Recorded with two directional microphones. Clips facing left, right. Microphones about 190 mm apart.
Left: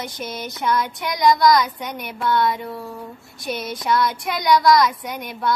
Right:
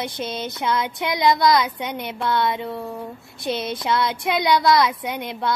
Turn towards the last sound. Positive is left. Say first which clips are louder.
# right 2 dB
turn(degrees=-25)  # may be behind; listen again after turning